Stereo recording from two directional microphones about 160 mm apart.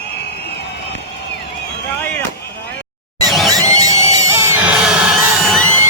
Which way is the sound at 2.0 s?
10° left (ahead or behind).